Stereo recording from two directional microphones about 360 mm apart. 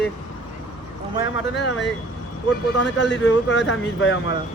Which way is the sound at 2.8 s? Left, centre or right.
Left.